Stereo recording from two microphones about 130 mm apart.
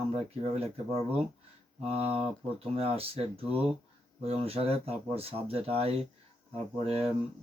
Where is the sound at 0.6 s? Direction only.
50° right (ahead or behind).